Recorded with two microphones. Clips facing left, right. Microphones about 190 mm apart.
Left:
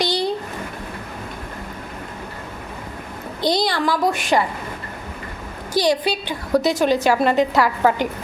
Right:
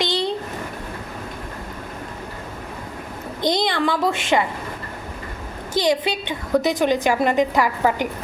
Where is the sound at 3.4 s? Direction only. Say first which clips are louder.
Even; 20° right (ahead or behind).